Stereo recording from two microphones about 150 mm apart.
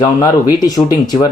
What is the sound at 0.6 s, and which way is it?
Speech, 25° left (ahead or behind).